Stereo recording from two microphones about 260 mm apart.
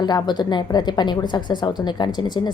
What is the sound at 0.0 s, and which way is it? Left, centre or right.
Speech, centre.